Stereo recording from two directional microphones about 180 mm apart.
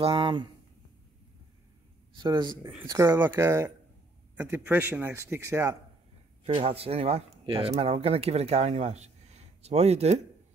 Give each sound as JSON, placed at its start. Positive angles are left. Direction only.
{"t": 0.0, "sound": "speech", "side_deg": -25}
{"t": 2.2, "sound": "speech", "side_deg": -15}
{"t": 6.4, "sound": "speech", "side_deg": -35}